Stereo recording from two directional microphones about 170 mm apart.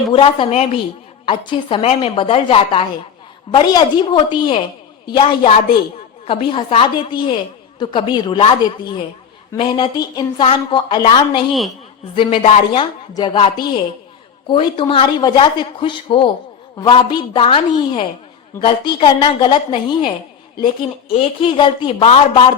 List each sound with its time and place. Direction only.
0.1 s a woman's voice: 30° left (ahead or behind)
9.6 s a woman's voice: 30° left (ahead or behind)
21.1 s a woman's voice: 35° left (ahead or behind)